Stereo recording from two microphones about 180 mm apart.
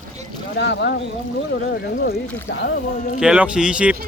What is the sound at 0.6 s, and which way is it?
Speech, 70° left (ahead or behind).